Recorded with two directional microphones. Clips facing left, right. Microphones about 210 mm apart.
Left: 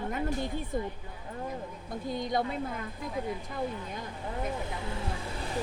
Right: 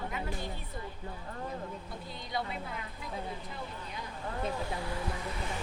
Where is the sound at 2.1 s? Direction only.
45° left (ahead or behind).